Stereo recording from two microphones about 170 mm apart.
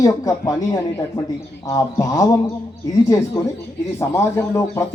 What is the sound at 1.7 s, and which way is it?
Speech, 20° left (ahead or behind).